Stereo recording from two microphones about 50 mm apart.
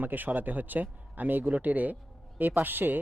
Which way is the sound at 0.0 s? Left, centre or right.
Right.